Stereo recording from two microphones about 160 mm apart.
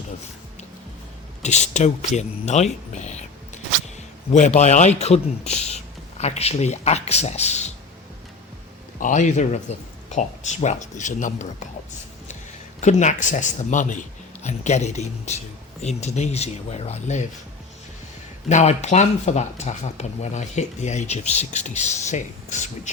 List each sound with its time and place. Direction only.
1.4 s speech: 45° left (ahead or behind)
4.3 s speech: 45° left (ahead or behind)
9.0 s speech: 55° left (ahead or behind)
12.8 s speech: 50° left (ahead or behind)
18.4 s speech: 45° left (ahead or behind)